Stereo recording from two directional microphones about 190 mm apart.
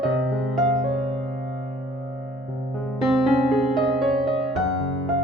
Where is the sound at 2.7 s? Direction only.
Centre (ahead or behind).